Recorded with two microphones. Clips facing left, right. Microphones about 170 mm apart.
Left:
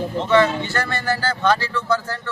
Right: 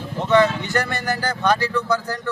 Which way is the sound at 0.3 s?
15° right (ahead or behind).